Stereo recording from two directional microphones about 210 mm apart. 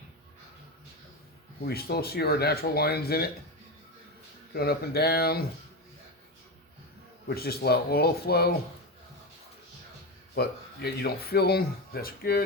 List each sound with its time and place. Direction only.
1.6 s speech: 50° left (ahead or behind)
4.5 s speech: 50° left (ahead or behind)
7.3 s speech: 45° left (ahead or behind)
10.3 s speech: 50° left (ahead or behind)